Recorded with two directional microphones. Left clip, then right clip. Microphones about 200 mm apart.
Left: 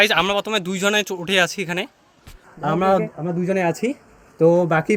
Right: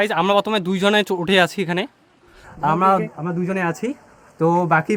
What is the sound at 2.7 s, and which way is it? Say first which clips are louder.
Speech: even; 5° left (ahead or behind).